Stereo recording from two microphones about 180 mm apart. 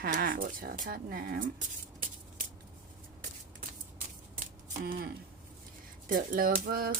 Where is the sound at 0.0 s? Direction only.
55° right (ahead or behind).